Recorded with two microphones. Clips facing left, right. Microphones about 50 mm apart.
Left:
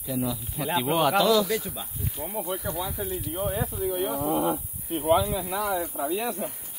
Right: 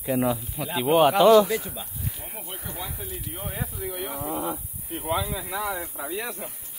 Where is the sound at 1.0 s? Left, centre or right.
Right.